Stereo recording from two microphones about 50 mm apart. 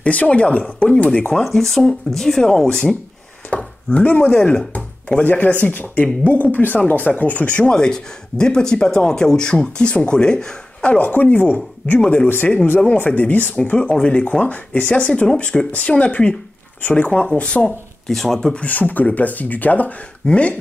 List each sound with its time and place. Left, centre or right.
0.0 s speech: left
1.4 s speech: centre
3.4 s chopping: left
4.4 s speech: left
5.2 s speech: left
7.7 s speech: centre
14.2 s speech: left
18.0 s speech: centre
18.5 s speech: left